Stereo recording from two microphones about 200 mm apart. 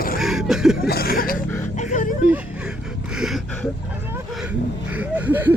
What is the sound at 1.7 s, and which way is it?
Music, 35° left (ahead or behind).